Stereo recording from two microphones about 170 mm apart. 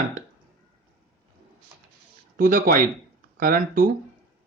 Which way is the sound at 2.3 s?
55° right (ahead or behind).